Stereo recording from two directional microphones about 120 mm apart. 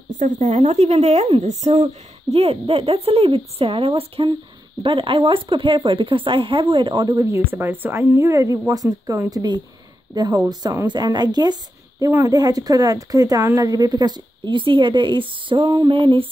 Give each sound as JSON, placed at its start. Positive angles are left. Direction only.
{"t": 0.2, "sound": "speech", "side_deg": -90}